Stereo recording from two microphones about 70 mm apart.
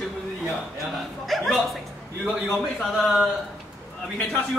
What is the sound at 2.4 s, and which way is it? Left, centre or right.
Speech, centre.